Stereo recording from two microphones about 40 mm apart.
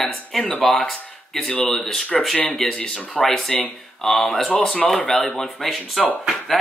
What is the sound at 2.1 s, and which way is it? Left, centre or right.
Speech, centre.